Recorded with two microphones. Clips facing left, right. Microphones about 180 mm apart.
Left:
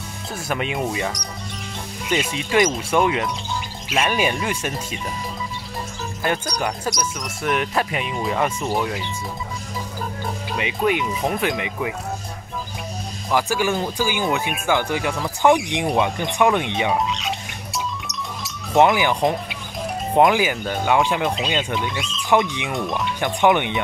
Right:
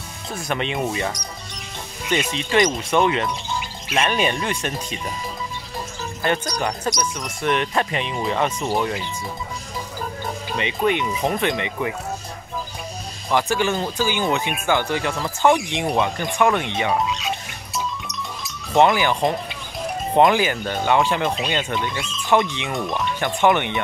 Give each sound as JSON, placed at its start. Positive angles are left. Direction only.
{"t": 0.3, "sound": "speech", "side_deg": 5}
{"t": 6.2, "sound": "speech", "side_deg": 5}
{"t": 10.2, "sound": "speech", "side_deg": 5}
{"t": 13.3, "sound": "speech", "side_deg": 5}
{"t": 18.8, "sound": "speech", "side_deg": 15}
{"t": 22.7, "sound": "speech", "side_deg": 0}
{"t": 23.2, "sound": "speech", "side_deg": 15}